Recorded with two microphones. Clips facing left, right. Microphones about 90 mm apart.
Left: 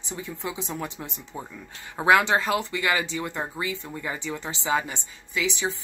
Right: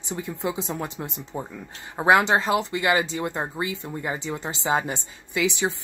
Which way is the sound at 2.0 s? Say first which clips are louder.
Right 1 dB; 25° right (ahead or behind).